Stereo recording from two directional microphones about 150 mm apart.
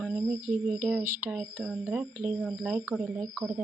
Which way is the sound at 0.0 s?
5° right (ahead or behind).